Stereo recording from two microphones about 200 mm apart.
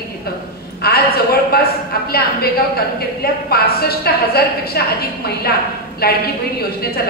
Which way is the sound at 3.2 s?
50° left (ahead or behind).